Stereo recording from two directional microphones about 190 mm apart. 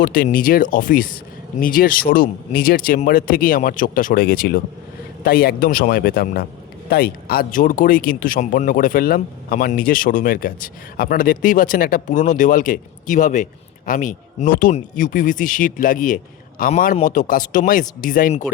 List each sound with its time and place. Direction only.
0.0 s speech: 50° left (ahead or behind)